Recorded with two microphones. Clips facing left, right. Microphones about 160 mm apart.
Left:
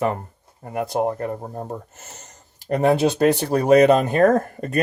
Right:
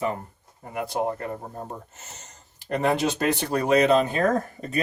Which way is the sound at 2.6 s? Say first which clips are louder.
Left 5 dB; 40° left (ahead or behind).